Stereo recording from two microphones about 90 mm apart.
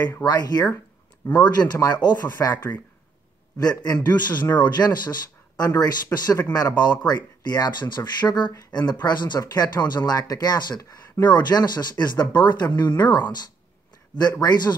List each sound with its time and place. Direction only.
0.2 s speech: 50° left (ahead or behind)
1.8 s speech: 50° left (ahead or behind)
5.7 s speech: 30° left (ahead or behind)
6.1 s speech: 50° left (ahead or behind)